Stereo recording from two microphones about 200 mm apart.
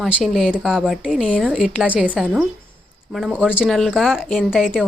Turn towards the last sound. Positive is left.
turn(degrees=-5)  # may be behind; listen again after turning